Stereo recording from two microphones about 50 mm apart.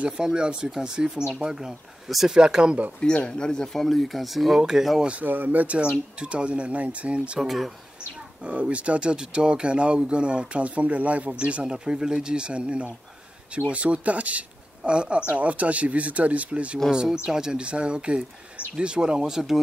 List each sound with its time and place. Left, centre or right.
0.0 s speech: centre
2.3 s speech: centre
3.3 s speech: centre
5.2 s speech: right
5.8 s speech: right
7.3 s speech: centre
8.4 s speech: right; by 19.6 s centre